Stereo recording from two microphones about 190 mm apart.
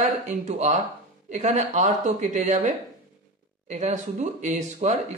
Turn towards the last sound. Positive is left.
turn(degrees=-40)  # may be behind; listen again after turning